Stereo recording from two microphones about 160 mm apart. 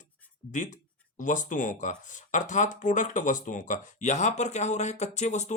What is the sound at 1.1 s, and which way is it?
Speech, 55° left (ahead or behind).